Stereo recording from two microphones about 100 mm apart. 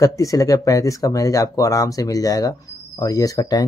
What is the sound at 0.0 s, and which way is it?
Speech, 35° left (ahead or behind).